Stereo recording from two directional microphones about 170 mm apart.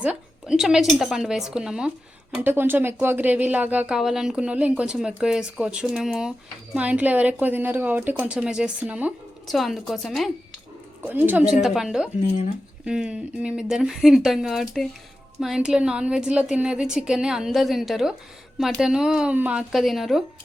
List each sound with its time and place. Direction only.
0.0 s a woman's voice: 5° right (ahead or behind)
11.0 s a woman's voice: 10° right (ahead or behind)